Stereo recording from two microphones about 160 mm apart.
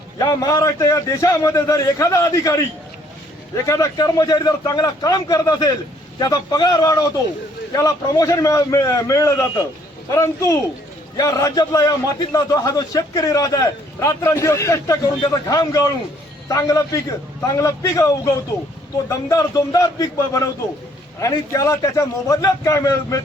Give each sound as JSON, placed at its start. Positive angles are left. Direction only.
{"t": 0.2, "sound": "a man's voice", "side_deg": 25}